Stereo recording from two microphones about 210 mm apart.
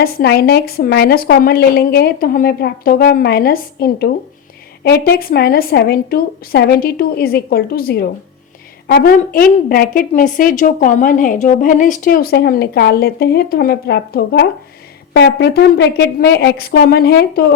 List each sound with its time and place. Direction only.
0.0 s a woman's voice: 50° left (ahead or behind)